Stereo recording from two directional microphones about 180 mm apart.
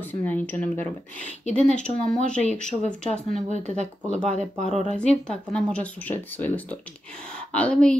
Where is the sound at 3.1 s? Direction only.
40° right (ahead or behind).